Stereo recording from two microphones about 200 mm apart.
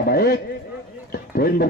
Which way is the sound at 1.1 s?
50° left (ahead or behind).